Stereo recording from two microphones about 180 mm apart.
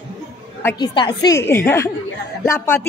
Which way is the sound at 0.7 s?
25° left (ahead or behind).